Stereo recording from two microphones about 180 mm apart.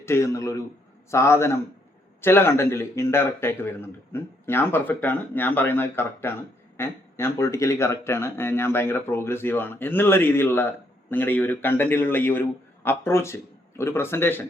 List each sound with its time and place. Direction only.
0.0 s speech: 15° left (ahead or behind)